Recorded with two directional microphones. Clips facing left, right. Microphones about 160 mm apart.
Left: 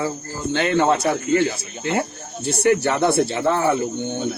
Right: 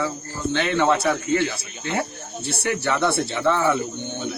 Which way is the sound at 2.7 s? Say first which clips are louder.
Left 5 dB; 40° left (ahead or behind).